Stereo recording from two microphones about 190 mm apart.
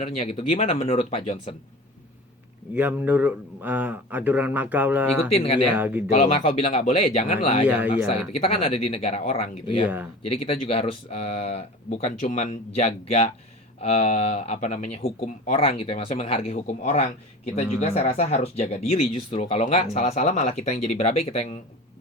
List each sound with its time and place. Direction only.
0.0 s speech: 30° left (ahead or behind)
2.7 s speech: 10° right (ahead or behind)
5.3 s speech: 30° left (ahead or behind)
5.7 s speech: 10° right (ahead or behind)
6.1 s speech: 35° left (ahead or behind)
9.8 s speech: 10° right (ahead or behind)
10.2 s speech: 30° left (ahead or behind)